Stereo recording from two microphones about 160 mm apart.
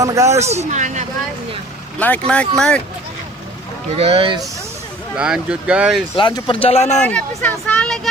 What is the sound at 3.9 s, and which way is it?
Speech, 40° right (ahead or behind).